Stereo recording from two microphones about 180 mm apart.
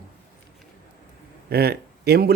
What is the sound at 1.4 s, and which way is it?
Speech, 60° right (ahead or behind).